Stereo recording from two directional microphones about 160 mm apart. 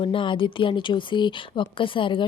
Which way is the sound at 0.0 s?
30° left (ahead or behind).